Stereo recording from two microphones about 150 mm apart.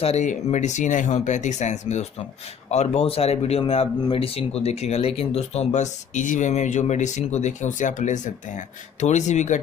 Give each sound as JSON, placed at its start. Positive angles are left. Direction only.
{"t": 0.0, "sound": "speech", "side_deg": 50}